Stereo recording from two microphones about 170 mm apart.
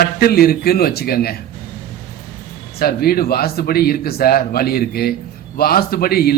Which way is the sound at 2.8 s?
65° left (ahead or behind).